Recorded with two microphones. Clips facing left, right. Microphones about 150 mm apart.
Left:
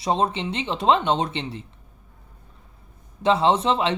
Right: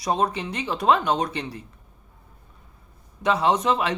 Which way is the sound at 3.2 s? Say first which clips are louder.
Left 2 dB; 30° left (ahead or behind).